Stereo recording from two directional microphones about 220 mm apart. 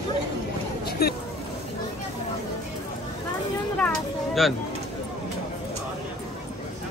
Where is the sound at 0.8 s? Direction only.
45° left (ahead or behind).